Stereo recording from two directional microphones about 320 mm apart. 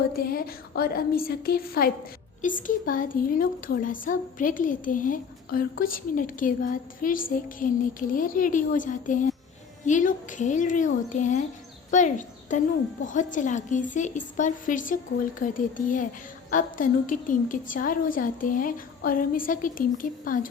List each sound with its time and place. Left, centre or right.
0.2 s a woman's voice: left